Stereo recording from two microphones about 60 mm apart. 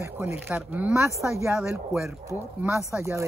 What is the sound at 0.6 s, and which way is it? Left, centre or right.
Speech, right.